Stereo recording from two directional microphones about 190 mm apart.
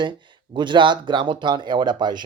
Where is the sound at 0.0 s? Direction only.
25° right (ahead or behind).